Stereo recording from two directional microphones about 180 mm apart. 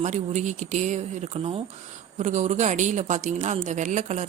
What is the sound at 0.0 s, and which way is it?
Speech, 40° right (ahead or behind).